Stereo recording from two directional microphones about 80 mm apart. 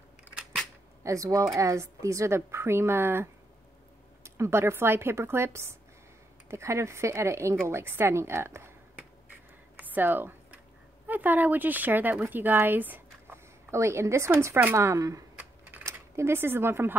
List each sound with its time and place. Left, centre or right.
1.0 s speech: right
9.8 s speech: right
13.7 s speech: right
15.3 s typing: centre
15.8 s speech: right